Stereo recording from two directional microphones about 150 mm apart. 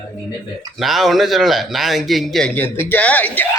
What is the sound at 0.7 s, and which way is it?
Speech, centre (ahead or behind).